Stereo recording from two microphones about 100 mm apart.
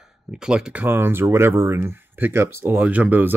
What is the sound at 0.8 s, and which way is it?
Speech, 20° right (ahead or behind).